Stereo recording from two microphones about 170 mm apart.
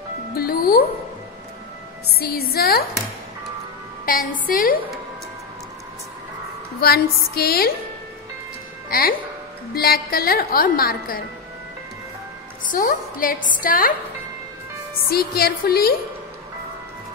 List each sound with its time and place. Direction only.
0.3 s music: 60° left (ahead or behind)
2.1 s a woman's voice: 65° left (ahead or behind)
4.0 s a woman's voice: 55° left (ahead or behind)
6.8 s a woman's voice: 65° left (ahead or behind)
9.8 s a woman's voice: 60° left (ahead or behind)
12.7 s a woman's voice: 55° left (ahead or behind)
15.0 s a woman's voice: 65° left (ahead or behind)